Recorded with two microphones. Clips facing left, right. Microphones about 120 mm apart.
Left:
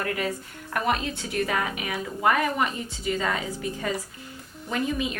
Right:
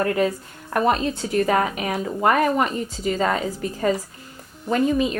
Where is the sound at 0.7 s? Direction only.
35° right (ahead or behind).